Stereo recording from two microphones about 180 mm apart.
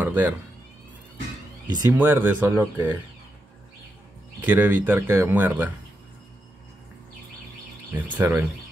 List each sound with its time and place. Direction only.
0.0 s speech: 10° right (ahead or behind)
1.9 s speech: 10° right (ahead or behind)
4.4 s speech: 10° right (ahead or behind)
7.9 s speech: 15° right (ahead or behind)